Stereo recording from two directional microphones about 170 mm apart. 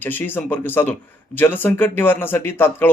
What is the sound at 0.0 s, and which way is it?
Speech, 10° left (ahead or behind).